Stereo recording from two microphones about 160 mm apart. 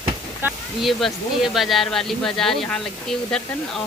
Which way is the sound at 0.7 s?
Centre (ahead or behind).